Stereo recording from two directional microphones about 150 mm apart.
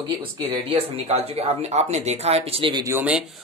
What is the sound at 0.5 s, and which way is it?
Speech, 40° right (ahead or behind).